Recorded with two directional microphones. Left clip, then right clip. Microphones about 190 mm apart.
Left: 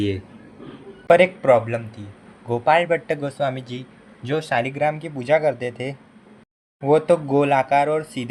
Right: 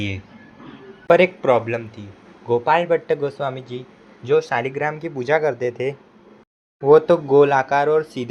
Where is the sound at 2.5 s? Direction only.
20° right (ahead or behind).